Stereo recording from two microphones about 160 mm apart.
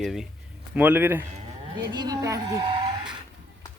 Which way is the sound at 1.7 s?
25° right (ahead or behind).